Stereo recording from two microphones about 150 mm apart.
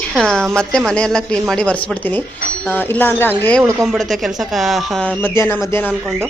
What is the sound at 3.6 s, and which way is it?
Speech, 15° right (ahead or behind).